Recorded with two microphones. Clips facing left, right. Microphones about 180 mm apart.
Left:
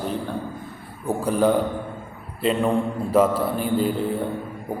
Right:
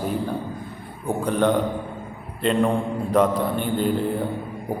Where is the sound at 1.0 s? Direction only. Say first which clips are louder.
Left 1 dB; 5° left (ahead or behind).